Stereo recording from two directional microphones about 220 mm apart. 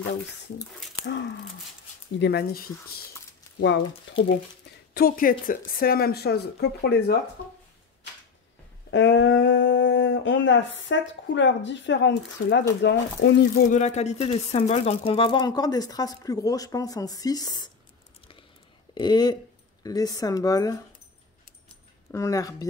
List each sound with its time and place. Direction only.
2.1 s speech: 50° left (ahead or behind)
3.5 s speech: 55° left (ahead or behind)
4.9 s a woman's voice: 40° left (ahead or behind)
8.9 s speech: 55° left (ahead or behind)
13.7 s speech: 30° left (ahead or behind)
18.9 s speech: 20° left (ahead or behind)
22.1 s speech: 15° left (ahead or behind)